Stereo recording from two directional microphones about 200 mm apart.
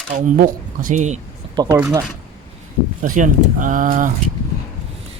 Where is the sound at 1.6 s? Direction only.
20° right (ahead or behind).